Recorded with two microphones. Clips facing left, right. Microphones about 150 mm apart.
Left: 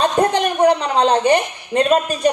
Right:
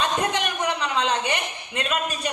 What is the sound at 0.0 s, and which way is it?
A man's voice, 35° left (ahead or behind).